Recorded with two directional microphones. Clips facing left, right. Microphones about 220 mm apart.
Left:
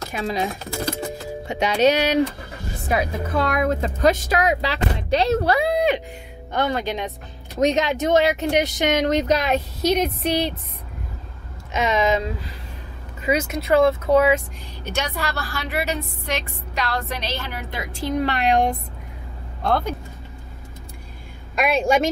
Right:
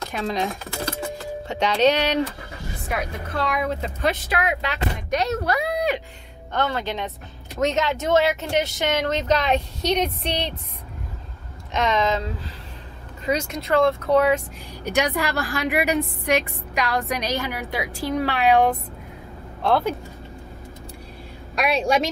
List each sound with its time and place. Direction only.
0.1 s speech: 5° left (ahead or behind)
2.9 s speech: 40° left (ahead or behind); by 6.0 s 25° left (ahead or behind)
6.5 s speech: 15° left (ahead or behind)
11.7 s speech: 10° left (ahead or behind)
15.0 s a woman's voice: 15° right (ahead or behind)
21.5 s speech: centre (ahead or behind)